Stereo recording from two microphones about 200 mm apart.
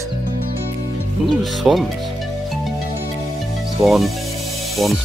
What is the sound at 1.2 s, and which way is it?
Speech, centre (ahead or behind).